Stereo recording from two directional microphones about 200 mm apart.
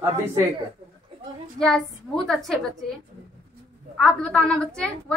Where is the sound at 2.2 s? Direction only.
Centre (ahead or behind).